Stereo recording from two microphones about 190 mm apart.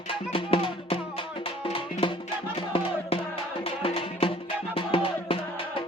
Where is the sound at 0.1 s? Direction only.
25° left (ahead or behind).